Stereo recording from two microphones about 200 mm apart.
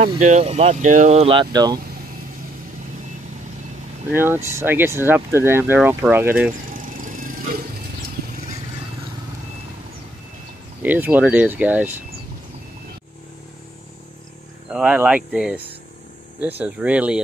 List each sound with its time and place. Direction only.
0.0 s speech: 35° right (ahead or behind); by 1.8 s 20° right (ahead or behind)
4.1 s speech: 10° right (ahead or behind)
7.0 s vehicle: 40° right (ahead or behind)
10.8 s speech: 10° right (ahead or behind)
14.7 s speech: 5° right (ahead or behind)